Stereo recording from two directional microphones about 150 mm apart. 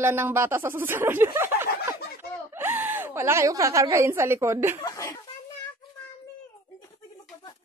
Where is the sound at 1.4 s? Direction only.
15° right (ahead or behind).